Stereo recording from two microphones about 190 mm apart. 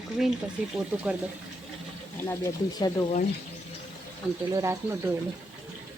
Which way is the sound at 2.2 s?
20° left (ahead or behind).